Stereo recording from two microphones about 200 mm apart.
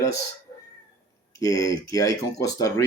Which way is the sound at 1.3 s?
15° left (ahead or behind).